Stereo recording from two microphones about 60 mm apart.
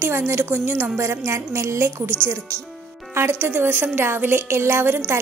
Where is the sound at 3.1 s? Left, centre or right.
Right.